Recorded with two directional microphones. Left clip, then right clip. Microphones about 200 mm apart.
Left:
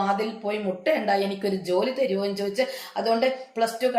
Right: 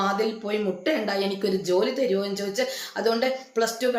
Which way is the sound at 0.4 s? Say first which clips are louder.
Left 1 dB; 15° right (ahead or behind).